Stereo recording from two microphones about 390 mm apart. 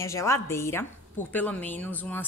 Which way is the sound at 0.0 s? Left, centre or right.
Centre.